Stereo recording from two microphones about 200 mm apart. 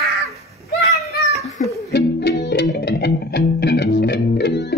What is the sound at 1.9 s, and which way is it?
Music, 55° left (ahead or behind).